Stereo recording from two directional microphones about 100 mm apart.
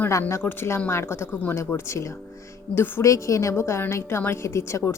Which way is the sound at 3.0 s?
30° left (ahead or behind).